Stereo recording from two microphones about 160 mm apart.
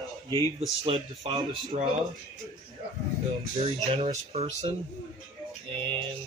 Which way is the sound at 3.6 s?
30° right (ahead or behind).